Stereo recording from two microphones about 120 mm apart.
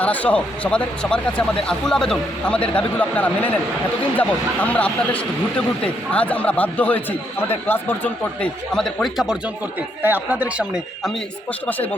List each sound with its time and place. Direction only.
0.0 s speech: 10° left (ahead or behind)
8.7 s speech: 5° left (ahead or behind)
10.0 s speech: 15° right (ahead or behind)